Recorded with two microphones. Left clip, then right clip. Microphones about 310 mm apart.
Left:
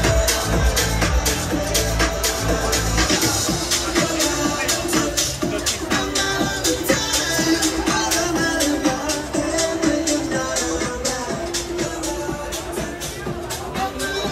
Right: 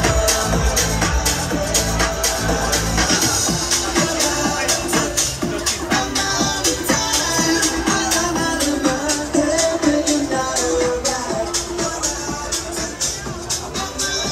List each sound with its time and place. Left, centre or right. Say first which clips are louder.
0.0 s music: right 2 dB; right